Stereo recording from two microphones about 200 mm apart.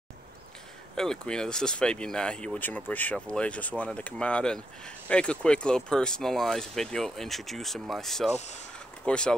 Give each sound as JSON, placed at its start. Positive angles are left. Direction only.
{"t": 0.9, "sound": "speech", "side_deg": 5}
{"t": 8.4, "sound": "speech", "side_deg": 35}
{"t": 8.7, "sound": "a sound", "side_deg": 5}